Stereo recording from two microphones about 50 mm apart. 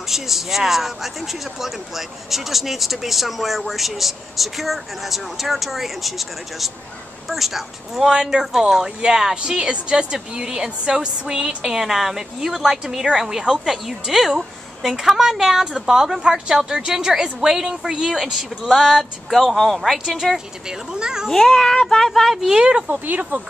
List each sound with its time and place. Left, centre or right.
0.1 s speech: centre
21.3 s speech: centre
22.6 s speech: centre
22.8 s speech: right